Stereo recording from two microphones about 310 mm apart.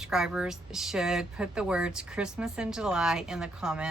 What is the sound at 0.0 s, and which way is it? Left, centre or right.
Speech, centre.